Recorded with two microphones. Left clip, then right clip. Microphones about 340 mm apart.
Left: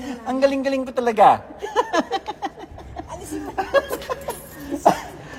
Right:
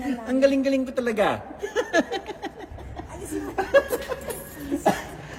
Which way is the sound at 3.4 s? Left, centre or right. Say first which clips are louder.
Even; centre.